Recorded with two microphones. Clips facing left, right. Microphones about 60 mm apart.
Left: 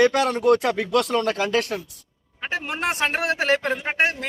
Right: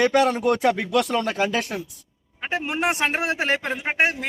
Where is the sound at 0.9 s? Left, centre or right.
Left.